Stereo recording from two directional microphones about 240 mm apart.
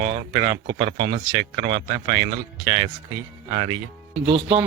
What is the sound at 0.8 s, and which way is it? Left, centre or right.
Speech, right.